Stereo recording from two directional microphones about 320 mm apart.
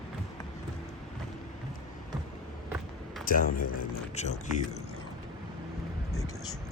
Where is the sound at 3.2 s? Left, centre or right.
Left.